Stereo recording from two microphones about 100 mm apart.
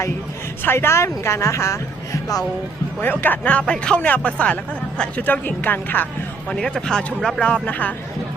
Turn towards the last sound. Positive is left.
turn(degrees=15)  # may be behind; listen again after turning